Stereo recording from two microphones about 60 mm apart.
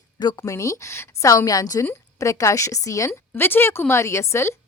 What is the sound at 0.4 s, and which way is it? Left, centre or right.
A woman's voice, left.